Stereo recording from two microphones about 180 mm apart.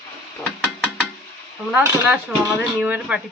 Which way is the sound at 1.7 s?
10° right (ahead or behind).